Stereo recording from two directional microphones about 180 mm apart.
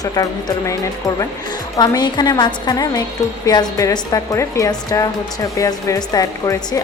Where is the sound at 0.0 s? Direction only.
20° left (ahead or behind).